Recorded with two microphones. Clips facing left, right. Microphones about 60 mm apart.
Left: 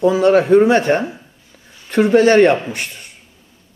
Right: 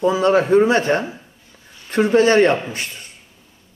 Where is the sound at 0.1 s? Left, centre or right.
Left.